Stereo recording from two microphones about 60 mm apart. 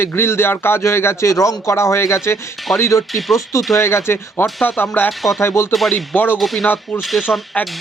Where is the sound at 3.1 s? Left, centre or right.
Centre.